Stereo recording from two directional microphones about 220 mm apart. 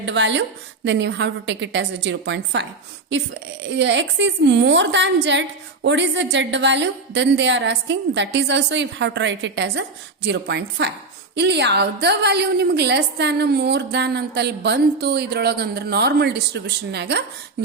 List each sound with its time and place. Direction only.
0.0 s a woman's voice: 55° right (ahead or behind)
3.7 s a woman's voice: 55° right (ahead or behind)